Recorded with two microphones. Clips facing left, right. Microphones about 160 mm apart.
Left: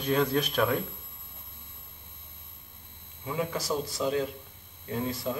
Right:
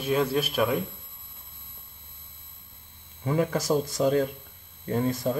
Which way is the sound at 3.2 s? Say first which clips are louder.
Right 6 dB; 50° right (ahead or behind).